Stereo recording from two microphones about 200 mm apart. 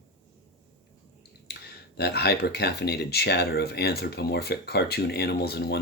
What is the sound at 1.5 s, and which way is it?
Speech, 55° left (ahead or behind).